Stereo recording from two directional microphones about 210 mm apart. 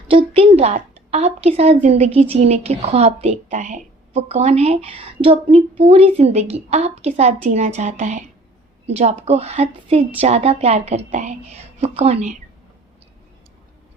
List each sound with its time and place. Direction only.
0.1 s a woman's voice: 25° right (ahead or behind)